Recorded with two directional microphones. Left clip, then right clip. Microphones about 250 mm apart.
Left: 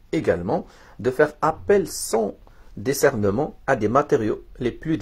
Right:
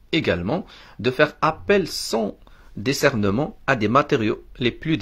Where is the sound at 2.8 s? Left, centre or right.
Right.